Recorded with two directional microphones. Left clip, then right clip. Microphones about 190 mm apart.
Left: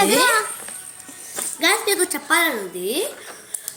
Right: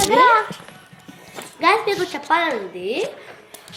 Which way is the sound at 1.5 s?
60° left (ahead or behind).